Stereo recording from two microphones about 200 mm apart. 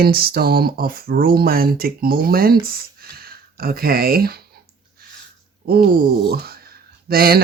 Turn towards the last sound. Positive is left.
turn(degrees=-50)  # may be behind; listen again after turning